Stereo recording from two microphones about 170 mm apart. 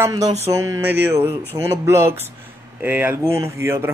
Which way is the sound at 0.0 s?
20° right (ahead or behind).